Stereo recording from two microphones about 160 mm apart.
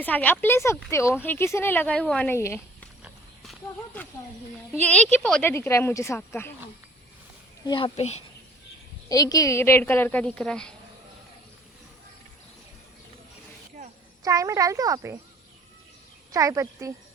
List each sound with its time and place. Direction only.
0.0 s speech: 10° left (ahead or behind)
3.0 s horse: centre (ahead or behind)
4.8 s speech: 10° left (ahead or behind)
5.5 s speech: 15° left (ahead or behind)
7.6 s a woman's voice: 25° left (ahead or behind)
7.9 s speech: 40° left (ahead or behind)
9.0 s speech: 25° left (ahead or behind); by 10.8 s 5° left (ahead or behind)
14.3 s speech: 20° right (ahead or behind)
16.3 s speech: 20° right (ahead or behind)